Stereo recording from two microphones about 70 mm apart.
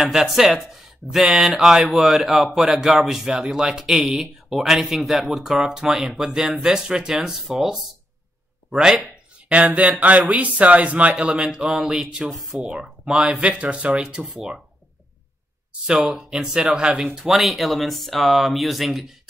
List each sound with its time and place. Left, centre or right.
0.0 s speech: centre
9.5 s a sound: centre
10.3 s speech: right
15.9 s speech: centre